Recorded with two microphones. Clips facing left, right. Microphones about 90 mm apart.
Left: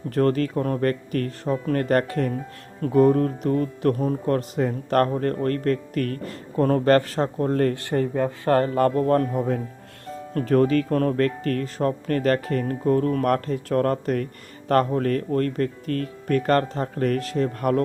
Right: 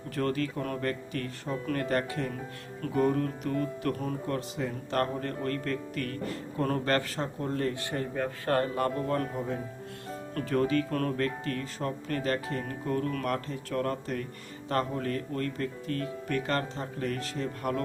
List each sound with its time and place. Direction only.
0.1 s speech: 45° left (ahead or behind)
2.8 s speech: 40° left (ahead or behind)
4.3 s speech: 50° left (ahead or behind)
11.2 s speech: 50° left (ahead or behind)
12.8 s speech: 40° left (ahead or behind)
13.2 s speech: 55° left (ahead or behind)